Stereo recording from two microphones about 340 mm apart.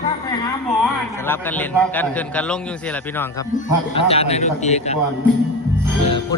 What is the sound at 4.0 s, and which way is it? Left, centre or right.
A man's voice, centre.